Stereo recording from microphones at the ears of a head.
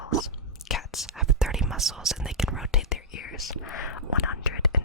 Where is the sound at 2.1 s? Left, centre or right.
Centre.